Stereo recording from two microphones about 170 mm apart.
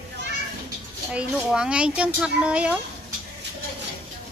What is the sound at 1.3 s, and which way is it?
Speech, 5° right (ahead or behind).